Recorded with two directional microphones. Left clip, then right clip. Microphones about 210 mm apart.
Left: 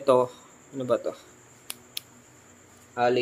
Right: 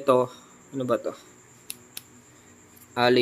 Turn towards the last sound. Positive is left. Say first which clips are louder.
# right 3 dB
turn(degrees=-25)  # may be behind; listen again after turning